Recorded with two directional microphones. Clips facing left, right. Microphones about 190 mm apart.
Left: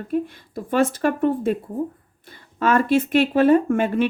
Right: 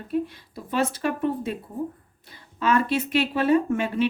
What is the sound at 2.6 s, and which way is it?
Speech, 50° left (ahead or behind).